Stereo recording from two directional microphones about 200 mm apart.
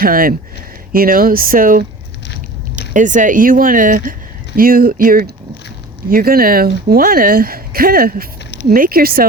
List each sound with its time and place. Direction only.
0.0 s a woman's voice: 45° right (ahead or behind)